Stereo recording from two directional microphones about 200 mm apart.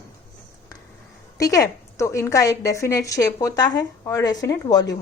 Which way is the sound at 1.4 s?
15° left (ahead or behind).